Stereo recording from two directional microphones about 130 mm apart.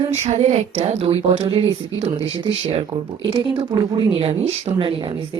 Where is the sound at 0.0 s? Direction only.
55° right (ahead or behind).